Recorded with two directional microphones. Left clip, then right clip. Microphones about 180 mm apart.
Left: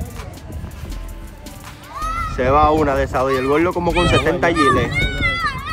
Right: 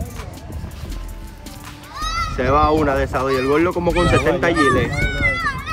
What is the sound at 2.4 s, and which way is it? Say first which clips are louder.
Speech: left 2 dB; 10° left (ahead or behind).